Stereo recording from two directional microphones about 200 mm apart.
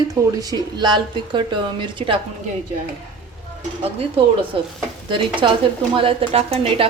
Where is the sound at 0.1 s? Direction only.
20° right (ahead or behind).